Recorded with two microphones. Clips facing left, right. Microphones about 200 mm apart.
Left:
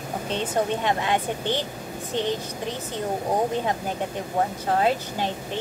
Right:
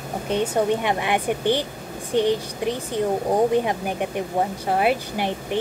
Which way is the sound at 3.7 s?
15° right (ahead or behind).